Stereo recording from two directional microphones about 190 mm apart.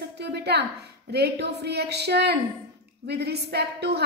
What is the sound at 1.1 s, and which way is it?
A woman's voice, 60° right (ahead or behind).